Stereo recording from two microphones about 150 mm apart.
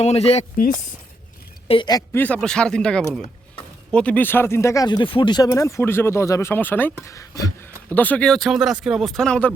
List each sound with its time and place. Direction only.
0.0 s speech: 45° left (ahead or behind)
0.5 s speech: 70° left (ahead or behind)
1.6 s speech: 35° left (ahead or behind)
1.9 s speech: 25° left (ahead or behind)
2.2 s speech: 5° left (ahead or behind)
7.9 s speech: 10° left (ahead or behind)